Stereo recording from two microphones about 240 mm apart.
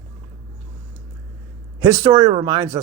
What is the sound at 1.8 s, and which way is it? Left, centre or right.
Speech, centre.